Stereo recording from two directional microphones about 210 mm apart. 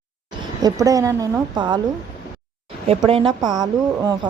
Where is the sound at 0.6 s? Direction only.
15° right (ahead or behind).